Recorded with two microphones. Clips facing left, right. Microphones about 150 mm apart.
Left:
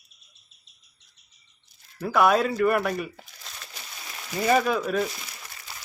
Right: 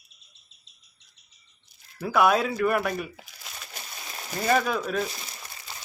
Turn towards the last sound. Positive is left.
turn(degrees=-25)  # may be behind; listen again after turning